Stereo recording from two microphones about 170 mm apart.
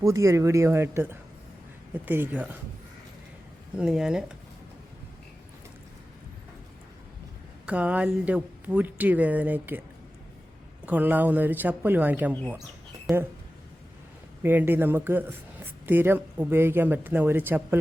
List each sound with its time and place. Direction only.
0.0 s speech: 20° right (ahead or behind)
3.8 s speech: 5° right (ahead or behind)
7.7 s speech: 10° right (ahead or behind)
10.8 s speech: 10° right (ahead or behind)
14.4 s speech: 10° right (ahead or behind)